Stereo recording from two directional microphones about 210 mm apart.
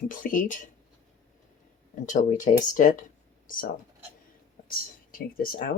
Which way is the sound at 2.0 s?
35° left (ahead or behind).